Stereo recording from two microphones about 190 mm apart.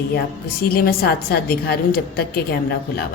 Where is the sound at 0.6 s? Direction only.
50° left (ahead or behind).